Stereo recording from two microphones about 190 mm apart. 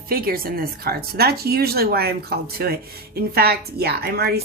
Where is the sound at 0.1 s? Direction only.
50° right (ahead or behind).